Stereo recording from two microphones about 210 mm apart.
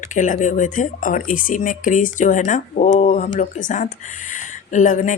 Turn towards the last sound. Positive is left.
turn(degrees=35)  # may be behind; listen again after turning